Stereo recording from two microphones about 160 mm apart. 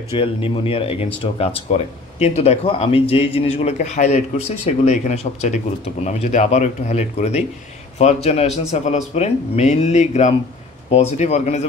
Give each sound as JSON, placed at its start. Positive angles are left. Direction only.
{"t": 0.2, "sound": "speech", "side_deg": 35}